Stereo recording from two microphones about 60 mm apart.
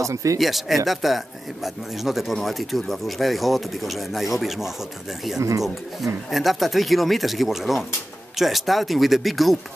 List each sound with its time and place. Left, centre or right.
0.0 s speech: right
0.4 s speech: centre
6.3 s speech: centre